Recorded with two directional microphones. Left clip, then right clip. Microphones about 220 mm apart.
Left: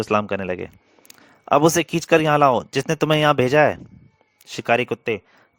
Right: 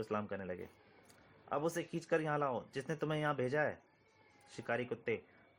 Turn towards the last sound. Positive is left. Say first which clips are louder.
# left 18 dB
turn(degrees=50)  # may be behind; listen again after turning